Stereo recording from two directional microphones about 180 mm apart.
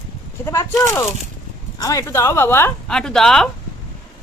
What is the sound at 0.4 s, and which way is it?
Speech, 15° left (ahead or behind).